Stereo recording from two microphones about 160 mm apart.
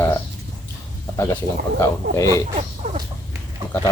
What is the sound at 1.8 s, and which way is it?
Speech, 20° left (ahead or behind).